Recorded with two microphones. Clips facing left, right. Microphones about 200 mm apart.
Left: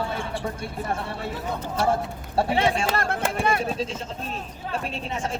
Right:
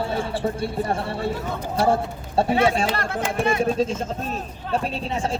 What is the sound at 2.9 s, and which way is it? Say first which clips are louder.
Music: even; 50° left (ahead or behind).